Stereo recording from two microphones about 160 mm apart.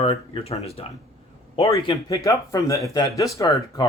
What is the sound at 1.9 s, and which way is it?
Speech, 20° left (ahead or behind).